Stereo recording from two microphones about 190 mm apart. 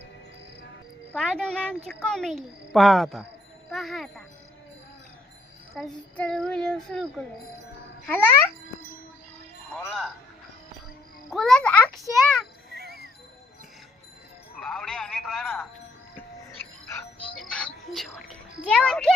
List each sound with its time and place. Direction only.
1.1 s a child's voice: centre (ahead or behind)
5.7 s a child's voice: centre (ahead or behind)
9.7 s speech: 5° left (ahead or behind)
11.3 s a sound: centre (ahead or behind)
12.7 s music: 55° right (ahead or behind)
14.6 s a sound: 5° left (ahead or behind)
17.3 s music: 5° left (ahead or behind)